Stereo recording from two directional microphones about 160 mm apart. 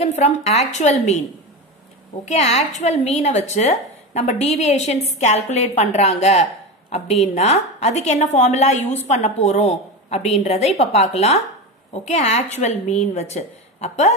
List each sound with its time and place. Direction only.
0.0 s a woman's voice: 45° left (ahead or behind)
2.2 s a woman's voice: 45° left (ahead or behind)